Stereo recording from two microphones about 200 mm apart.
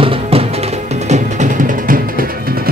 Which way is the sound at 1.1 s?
40° right (ahead or behind).